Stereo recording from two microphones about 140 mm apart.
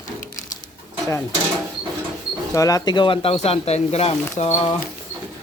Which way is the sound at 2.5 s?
25° left (ahead or behind).